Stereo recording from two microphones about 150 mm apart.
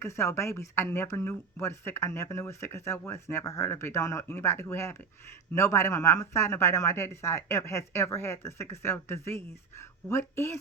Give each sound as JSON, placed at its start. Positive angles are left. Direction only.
{"t": 0.0, "sound": "speech", "side_deg": 20}